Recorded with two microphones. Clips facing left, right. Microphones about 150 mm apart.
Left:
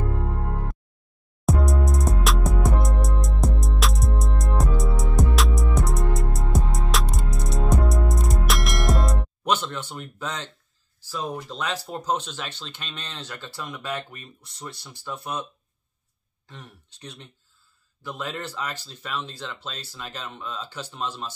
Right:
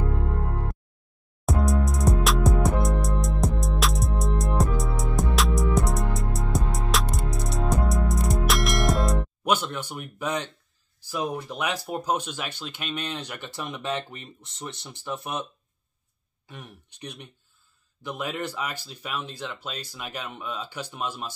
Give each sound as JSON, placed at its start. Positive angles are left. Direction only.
{"t": 1.4, "sound": "music", "side_deg": 0}
{"t": 9.5, "sound": "speech", "side_deg": -10}
{"t": 16.4, "sound": "speech", "side_deg": -10}